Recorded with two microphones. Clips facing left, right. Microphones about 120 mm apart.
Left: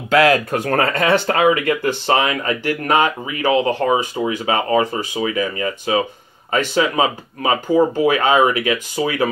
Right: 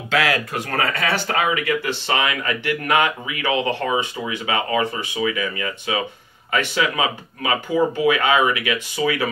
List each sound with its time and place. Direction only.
0.1 s speech: 40° left (ahead or behind)